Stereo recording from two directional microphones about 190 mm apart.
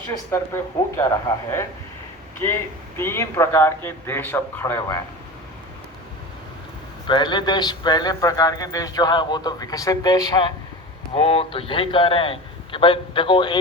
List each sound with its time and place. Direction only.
0.1 s speech: 15° left (ahead or behind)
3.0 s speech: 15° left (ahead or behind)
7.1 s speech: 25° left (ahead or behind)